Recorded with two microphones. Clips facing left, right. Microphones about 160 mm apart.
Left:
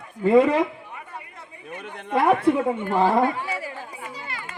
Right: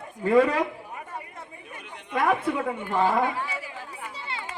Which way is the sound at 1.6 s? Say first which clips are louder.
Left 8 dB; 50° left (ahead or behind).